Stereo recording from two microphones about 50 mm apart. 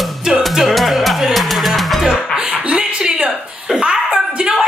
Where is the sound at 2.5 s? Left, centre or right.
Right.